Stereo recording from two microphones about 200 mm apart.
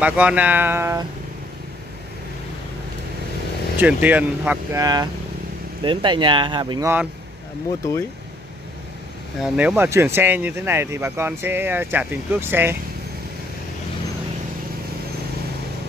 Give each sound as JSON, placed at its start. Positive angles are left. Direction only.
{"t": 0.0, "sound": "speech", "side_deg": -5}
{"t": 3.7, "sound": "speech", "side_deg": -10}
{"t": 4.8, "sound": "speech", "side_deg": -20}
{"t": 9.4, "sound": "speech", "side_deg": -5}